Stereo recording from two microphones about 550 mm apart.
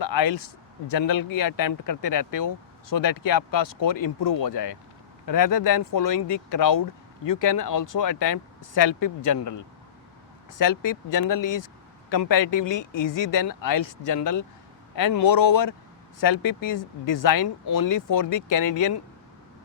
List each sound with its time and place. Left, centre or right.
0.0 s a sound: left
0.9 s speech: left
12.9 s speech: left
13.3 s speech: left
16.4 s speech: left
17.2 s speech: left